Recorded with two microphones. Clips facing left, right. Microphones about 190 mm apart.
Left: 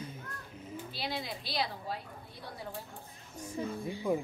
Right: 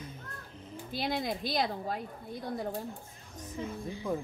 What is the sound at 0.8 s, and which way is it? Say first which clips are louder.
A woman's voice: right 7 dB; 50° right (ahead or behind).